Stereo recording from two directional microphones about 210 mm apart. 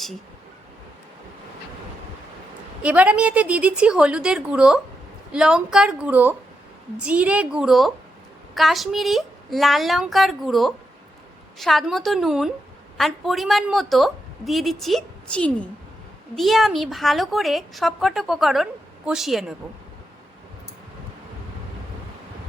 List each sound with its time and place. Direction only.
2.8 s a woman's voice: 5° right (ahead or behind)